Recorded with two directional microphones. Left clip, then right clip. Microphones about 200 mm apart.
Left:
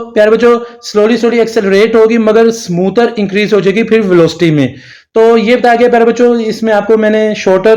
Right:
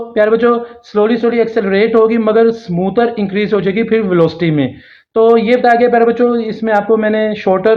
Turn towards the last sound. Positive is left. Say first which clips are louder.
# left 4 dB
turn(degrees=45)  # may be behind; listen again after turning